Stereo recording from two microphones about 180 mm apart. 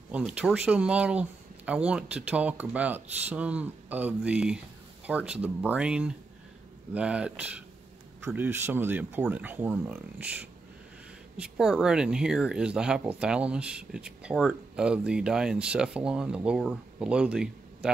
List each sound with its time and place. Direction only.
0.1 s speech: 5° right (ahead or behind)